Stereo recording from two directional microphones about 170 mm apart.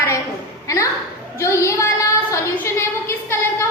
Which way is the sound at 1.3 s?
15° left (ahead or behind).